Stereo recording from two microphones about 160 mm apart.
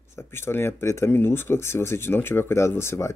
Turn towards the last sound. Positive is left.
turn(degrees=15)  # may be behind; listen again after turning